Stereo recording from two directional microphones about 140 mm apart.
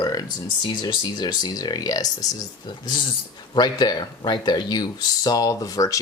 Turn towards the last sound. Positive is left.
turn(degrees=25)  # may be behind; listen again after turning